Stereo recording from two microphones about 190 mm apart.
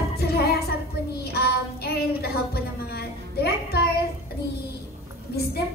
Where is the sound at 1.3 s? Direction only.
55° left (ahead or behind).